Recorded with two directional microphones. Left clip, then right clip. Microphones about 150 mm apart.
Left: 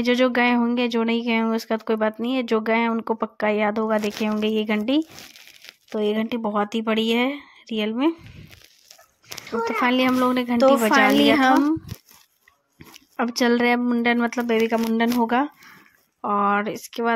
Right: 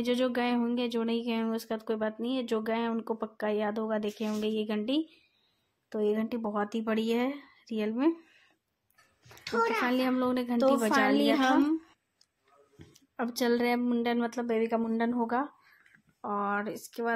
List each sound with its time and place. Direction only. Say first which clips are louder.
0.0 s speech: left 10 dB; 25° left (ahead or behind)
5.9 s speech: left 6 dB; 35° left (ahead or behind)
9.8 s speech: left 9 dB; 25° left (ahead or behind)
13.1 s speech: left 8 dB; 30° left (ahead or behind)